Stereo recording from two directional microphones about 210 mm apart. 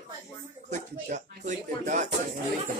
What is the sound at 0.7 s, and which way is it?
Speech, 35° right (ahead or behind).